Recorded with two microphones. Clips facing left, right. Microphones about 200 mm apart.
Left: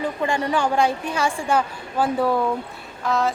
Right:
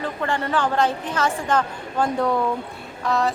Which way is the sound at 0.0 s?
15° left (ahead or behind).